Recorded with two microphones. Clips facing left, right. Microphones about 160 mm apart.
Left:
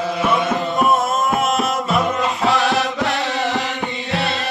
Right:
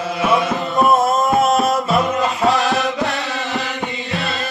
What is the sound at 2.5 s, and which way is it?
Chant, centre (ahead or behind).